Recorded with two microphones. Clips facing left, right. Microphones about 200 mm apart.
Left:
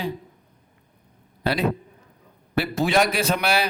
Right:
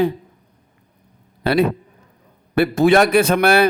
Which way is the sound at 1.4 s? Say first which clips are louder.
Right 6 dB; 55° right (ahead or behind).